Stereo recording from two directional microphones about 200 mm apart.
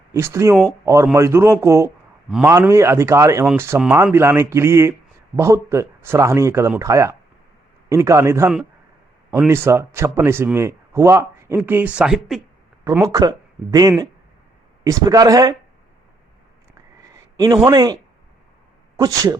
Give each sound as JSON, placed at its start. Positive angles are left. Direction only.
{"t": 0.1, "sound": "a man's voice", "side_deg": -15}
{"t": 12.8, "sound": "a man's voice", "side_deg": -15}
{"t": 17.3, "sound": "a man's voice", "side_deg": -20}
{"t": 18.9, "sound": "a man's voice", "side_deg": -15}